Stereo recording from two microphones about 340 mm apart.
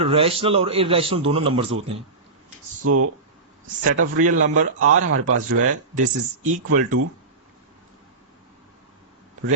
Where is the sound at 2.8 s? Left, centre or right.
Right.